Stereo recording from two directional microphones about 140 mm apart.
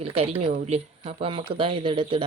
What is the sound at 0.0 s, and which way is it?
Speech, 45° right (ahead or behind).